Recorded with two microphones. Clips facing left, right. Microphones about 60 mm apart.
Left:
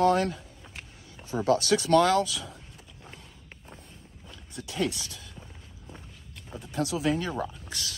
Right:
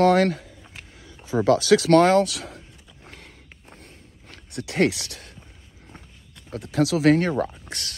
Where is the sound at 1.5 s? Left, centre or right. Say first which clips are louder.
Right 6 dB; right.